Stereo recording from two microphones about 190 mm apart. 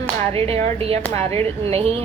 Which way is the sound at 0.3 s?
30° right (ahead or behind).